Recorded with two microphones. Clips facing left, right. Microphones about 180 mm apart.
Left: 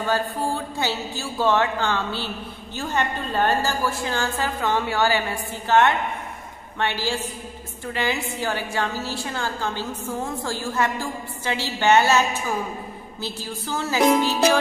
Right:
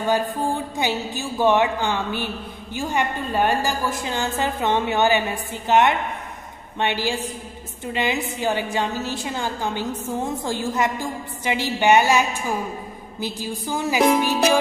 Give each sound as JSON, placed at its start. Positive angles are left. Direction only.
{"t": 0.0, "sound": "a woman's voice", "side_deg": -15}